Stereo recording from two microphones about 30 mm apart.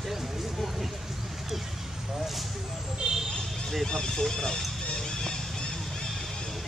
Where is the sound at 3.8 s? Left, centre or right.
Left.